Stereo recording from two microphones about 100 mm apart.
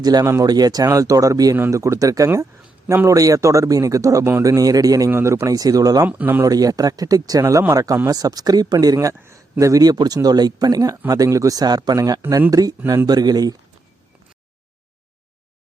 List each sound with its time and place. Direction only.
0.0 s speech: 40° right (ahead or behind)
2.8 s a man's voice: 20° right (ahead or behind)
3.1 s speech: 35° right (ahead or behind)
6.1 s speech: 15° right (ahead or behind)
6.4 s speech: 35° right (ahead or behind)
12.8 s speech: 25° right (ahead or behind)
13.1 s speech: 40° right (ahead or behind)